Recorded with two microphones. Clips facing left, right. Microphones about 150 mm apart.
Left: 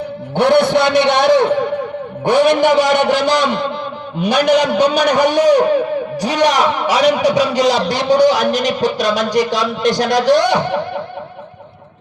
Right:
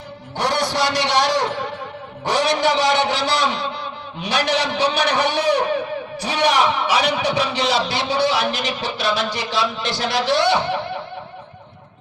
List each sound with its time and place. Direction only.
0.3 s a man's voice: 55° left (ahead or behind)